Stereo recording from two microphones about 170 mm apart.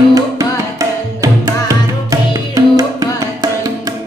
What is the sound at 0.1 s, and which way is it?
Music, 20° right (ahead or behind).